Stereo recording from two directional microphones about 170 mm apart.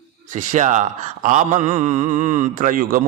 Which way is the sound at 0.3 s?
45° right (ahead or behind).